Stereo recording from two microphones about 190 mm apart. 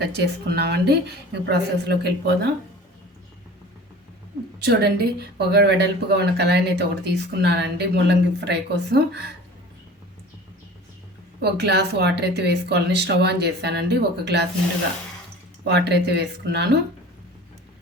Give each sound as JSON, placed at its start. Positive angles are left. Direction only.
{"t": 0.0, "sound": "speech", "side_deg": -60}
{"t": 4.6, "sound": "speech", "side_deg": -60}
{"t": 11.3, "sound": "speech", "side_deg": -60}
{"t": 15.6, "sound": "speech", "side_deg": -60}